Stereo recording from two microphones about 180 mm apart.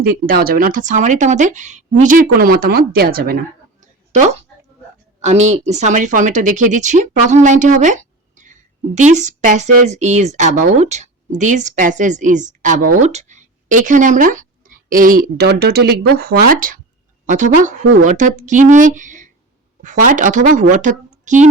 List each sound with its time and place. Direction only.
0.0 s speech: 55° right (ahead or behind)
4.1 s speech: 40° right (ahead or behind)
5.6 s speech: 40° right (ahead or behind)